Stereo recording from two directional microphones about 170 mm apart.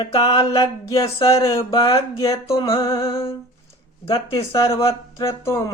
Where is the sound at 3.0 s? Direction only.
20° left (ahead or behind).